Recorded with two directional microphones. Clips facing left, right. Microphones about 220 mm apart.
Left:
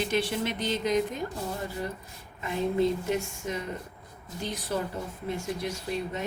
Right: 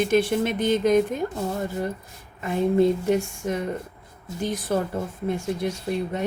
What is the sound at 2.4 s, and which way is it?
Speech, 50° right (ahead or behind).